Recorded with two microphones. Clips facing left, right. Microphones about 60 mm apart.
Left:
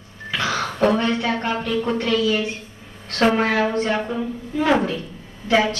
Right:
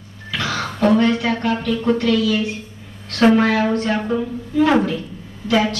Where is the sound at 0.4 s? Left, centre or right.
Left.